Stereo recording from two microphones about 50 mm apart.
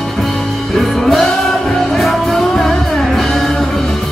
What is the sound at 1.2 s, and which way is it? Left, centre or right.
Music, centre.